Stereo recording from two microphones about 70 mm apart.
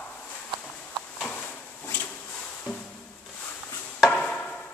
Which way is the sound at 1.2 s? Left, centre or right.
Centre.